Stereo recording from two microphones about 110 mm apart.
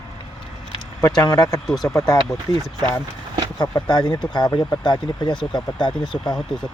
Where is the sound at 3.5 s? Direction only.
35° left (ahead or behind).